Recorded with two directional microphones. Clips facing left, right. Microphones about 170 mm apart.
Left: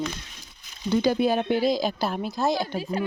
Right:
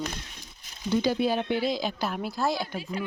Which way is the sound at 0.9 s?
50° left (ahead or behind).